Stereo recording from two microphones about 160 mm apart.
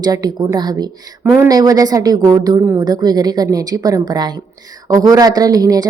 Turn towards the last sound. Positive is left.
turn(degrees=-25)  # may be behind; listen again after turning